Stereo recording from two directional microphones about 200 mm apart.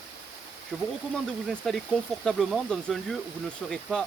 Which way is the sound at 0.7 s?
Centre (ahead or behind).